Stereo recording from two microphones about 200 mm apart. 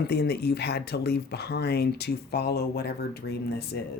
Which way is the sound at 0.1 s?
55° left (ahead or behind).